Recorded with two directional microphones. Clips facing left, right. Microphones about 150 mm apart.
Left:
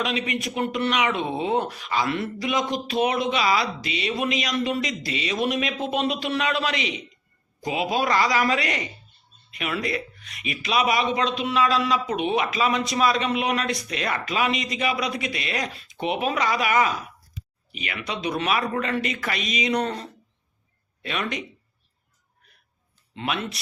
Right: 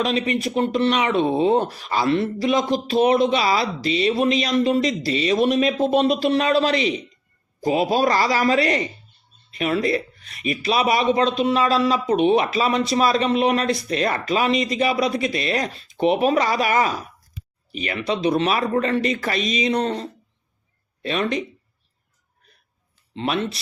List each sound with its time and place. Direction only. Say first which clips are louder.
0.0 s speech: right 5 dB; 35° right (ahead or behind)
23.1 s speech: right 5 dB; 30° right (ahead or behind)